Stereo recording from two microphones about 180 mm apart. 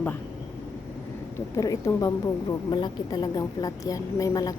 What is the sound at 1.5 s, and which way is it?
A woman's voice, 20° left (ahead or behind).